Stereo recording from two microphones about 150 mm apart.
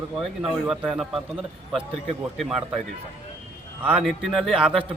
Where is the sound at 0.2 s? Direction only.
Centre (ahead or behind).